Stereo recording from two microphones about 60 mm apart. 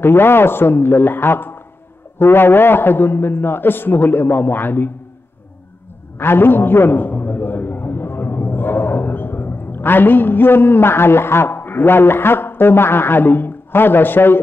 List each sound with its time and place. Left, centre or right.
0.0 s a man's voice: left
6.1 s a man's voice: left